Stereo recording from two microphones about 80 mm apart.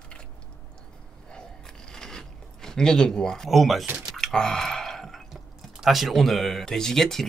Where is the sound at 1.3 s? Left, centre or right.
Centre.